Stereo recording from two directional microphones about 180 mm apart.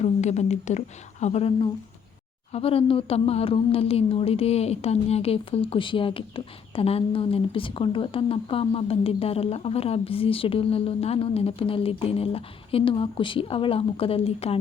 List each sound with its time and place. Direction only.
0.0 s a woman's voice: 40° left (ahead or behind)